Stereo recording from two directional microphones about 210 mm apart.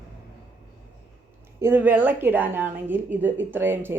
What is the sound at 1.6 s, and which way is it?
A woman's voice, 10° right (ahead or behind).